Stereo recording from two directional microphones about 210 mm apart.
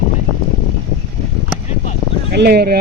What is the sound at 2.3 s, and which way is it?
Speech, 50° right (ahead or behind).